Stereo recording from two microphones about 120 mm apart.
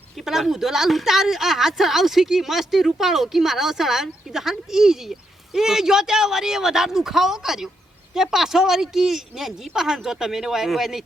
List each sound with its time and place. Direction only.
0.2 s a woman's voice: 5° right (ahead or behind)